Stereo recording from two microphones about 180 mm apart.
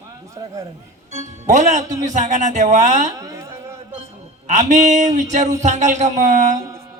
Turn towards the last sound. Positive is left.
turn(degrees=-40)  # may be behind; listen again after turning